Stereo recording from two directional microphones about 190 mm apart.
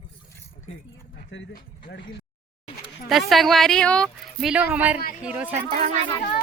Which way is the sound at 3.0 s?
Centre (ahead or behind).